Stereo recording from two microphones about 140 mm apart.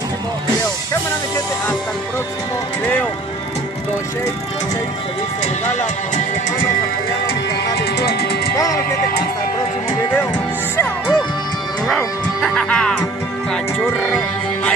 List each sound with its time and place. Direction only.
8.5 s music: 20° left (ahead or behind)
12.4 s music: 5° left (ahead or behind)
14.0 s music: 5° left (ahead or behind)